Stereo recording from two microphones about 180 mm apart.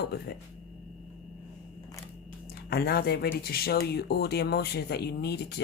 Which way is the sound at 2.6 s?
60° left (ahead or behind).